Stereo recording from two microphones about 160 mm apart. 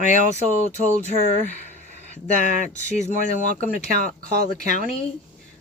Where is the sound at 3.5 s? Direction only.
65° right (ahead or behind).